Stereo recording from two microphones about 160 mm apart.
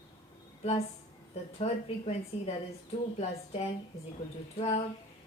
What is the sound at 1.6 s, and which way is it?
A woman's voice, 40° left (ahead or behind).